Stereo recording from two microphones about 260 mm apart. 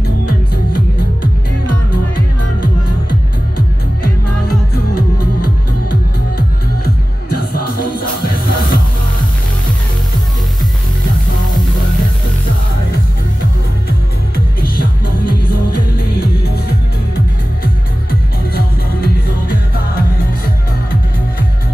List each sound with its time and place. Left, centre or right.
2.6 s music: left
7.2 s music: left
14.8 s music: left
16.1 s music: left